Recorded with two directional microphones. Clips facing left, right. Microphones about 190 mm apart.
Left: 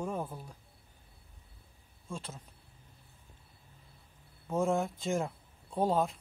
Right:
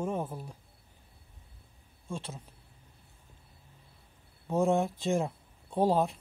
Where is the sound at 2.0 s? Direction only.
30° right (ahead or behind).